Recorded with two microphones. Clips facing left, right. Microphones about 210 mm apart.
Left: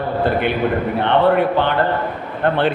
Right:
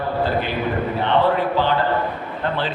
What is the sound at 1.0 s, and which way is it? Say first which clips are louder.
A man's voice: left 4 dB; 60° left (ahead or behind).